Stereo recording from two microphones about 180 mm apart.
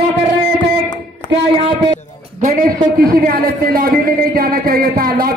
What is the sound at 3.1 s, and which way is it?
Speech, 55° right (ahead or behind).